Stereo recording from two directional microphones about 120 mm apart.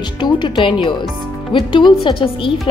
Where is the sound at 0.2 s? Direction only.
40° left (ahead or behind).